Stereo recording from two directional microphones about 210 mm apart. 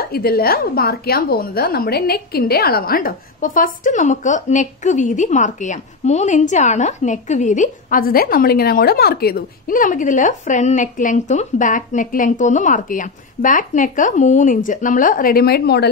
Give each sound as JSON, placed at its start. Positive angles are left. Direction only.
{"t": 0.0, "sound": "a woman's voice", "side_deg": 45}